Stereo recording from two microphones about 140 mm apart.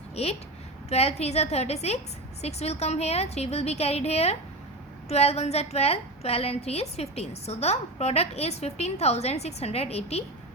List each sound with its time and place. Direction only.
0.2 s a woman's voice: 50° left (ahead or behind)